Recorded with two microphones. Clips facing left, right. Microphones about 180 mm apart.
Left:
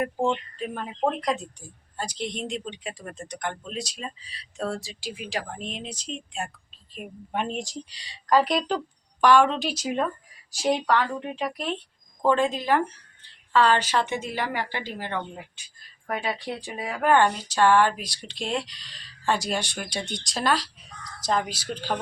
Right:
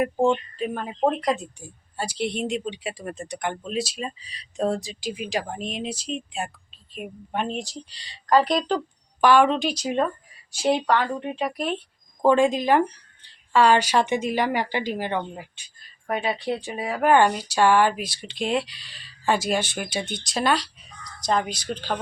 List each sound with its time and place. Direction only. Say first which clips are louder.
0.0 s speech: right 4 dB; 10° right (ahead or behind)
16.2 s a woman's voice: right 4 dB; 5° right (ahead or behind)